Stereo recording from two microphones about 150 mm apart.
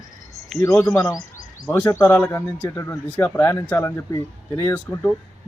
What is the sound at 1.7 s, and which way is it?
Speech, 20° left (ahead or behind).